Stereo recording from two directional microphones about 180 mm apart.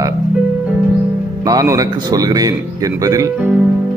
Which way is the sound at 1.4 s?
20° right (ahead or behind).